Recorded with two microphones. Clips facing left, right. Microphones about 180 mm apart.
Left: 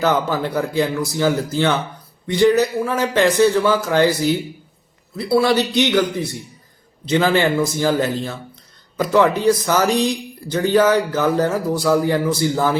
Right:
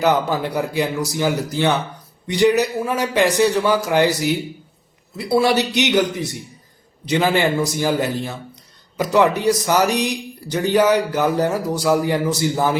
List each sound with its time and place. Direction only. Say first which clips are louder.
0.0 s speech: even; 15° right (ahead or behind)